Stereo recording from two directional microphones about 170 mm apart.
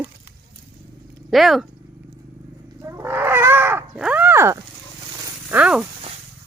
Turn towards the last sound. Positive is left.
turn(degrees=-5)  # may be behind; listen again after turning